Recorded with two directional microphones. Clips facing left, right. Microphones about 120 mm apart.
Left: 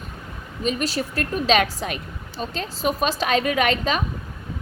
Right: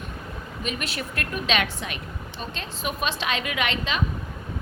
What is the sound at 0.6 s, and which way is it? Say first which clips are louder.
A woman's voice: left 8 dB; 35° left (ahead or behind).